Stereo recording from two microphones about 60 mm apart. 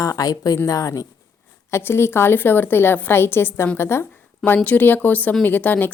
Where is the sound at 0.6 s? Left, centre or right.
Left.